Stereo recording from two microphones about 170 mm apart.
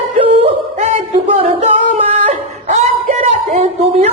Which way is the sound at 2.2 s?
40° right (ahead or behind).